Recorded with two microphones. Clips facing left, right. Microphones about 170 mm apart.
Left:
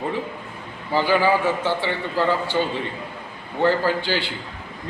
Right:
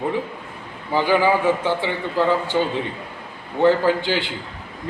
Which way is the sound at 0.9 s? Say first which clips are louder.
Right 1 dB; 15° right (ahead or behind).